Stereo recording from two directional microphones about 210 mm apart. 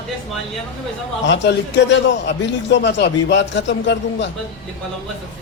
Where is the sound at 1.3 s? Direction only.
55° left (ahead or behind).